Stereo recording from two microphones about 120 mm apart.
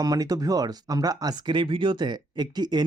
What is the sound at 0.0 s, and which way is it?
Speech, 30° right (ahead or behind).